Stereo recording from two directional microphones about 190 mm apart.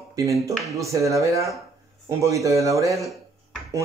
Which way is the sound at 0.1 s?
15° right (ahead or behind).